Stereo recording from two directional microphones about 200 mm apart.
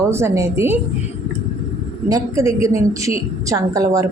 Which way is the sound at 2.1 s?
15° right (ahead or behind).